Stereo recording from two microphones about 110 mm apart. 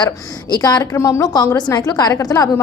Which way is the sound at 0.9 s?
25° left (ahead or behind).